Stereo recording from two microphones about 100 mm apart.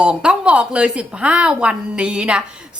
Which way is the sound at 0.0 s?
10° right (ahead or behind).